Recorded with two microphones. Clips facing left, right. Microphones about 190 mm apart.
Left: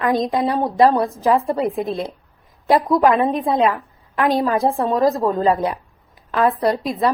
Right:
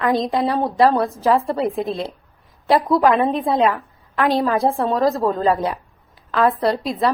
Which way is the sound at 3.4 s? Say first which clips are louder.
Even; 15° left (ahead or behind).